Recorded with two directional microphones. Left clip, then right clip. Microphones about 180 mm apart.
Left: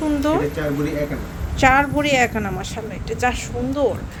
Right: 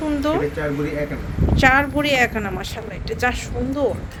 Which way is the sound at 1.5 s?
Centre (ahead or behind).